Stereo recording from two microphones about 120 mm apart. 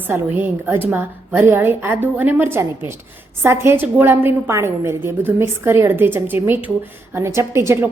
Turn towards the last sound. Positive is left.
turn(degrees=-20)  # may be behind; listen again after turning